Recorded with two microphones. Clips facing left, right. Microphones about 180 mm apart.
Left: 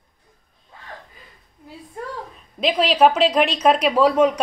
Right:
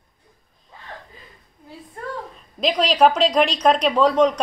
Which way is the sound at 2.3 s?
5° left (ahead or behind).